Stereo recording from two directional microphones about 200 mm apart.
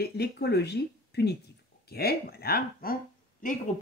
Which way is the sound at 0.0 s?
55° left (ahead or behind).